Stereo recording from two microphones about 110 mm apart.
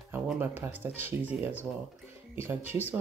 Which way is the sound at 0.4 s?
20° right (ahead or behind).